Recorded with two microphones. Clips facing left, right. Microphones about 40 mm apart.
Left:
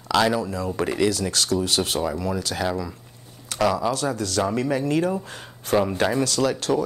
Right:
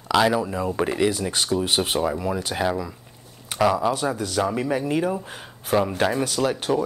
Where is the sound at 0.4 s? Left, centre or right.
Right.